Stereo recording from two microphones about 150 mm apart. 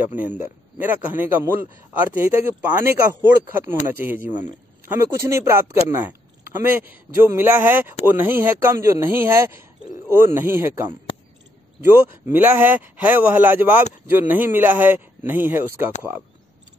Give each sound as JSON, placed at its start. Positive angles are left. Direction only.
{"t": 0.2, "sound": "speech", "side_deg": -10}